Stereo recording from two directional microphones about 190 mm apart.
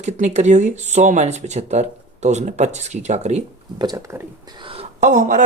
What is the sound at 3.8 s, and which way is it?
Speech, 20° right (ahead or behind).